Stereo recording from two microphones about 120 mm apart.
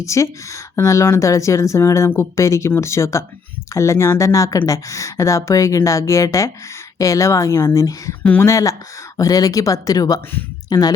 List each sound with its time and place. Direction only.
0.0 s speech: 25° left (ahead or behind)
8.2 s speech: 10° left (ahead or behind)
8.4 s speech: 25° left (ahead or behind)